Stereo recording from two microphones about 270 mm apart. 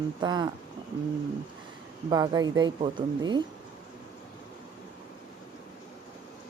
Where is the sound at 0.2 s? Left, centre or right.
Centre.